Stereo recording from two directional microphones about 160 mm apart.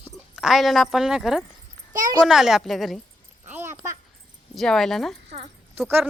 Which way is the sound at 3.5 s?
10° right (ahead or behind).